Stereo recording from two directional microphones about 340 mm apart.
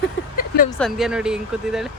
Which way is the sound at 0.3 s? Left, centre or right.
Left.